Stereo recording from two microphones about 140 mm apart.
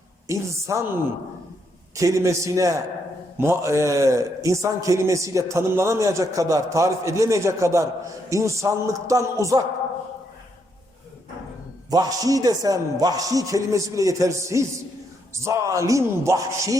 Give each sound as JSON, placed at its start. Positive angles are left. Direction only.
{"t": 0.3, "sound": "a man's voice", "side_deg": -20}
{"t": 2.0, "sound": "a man's voice", "side_deg": -25}
{"t": 11.9, "sound": "a man's voice", "side_deg": -25}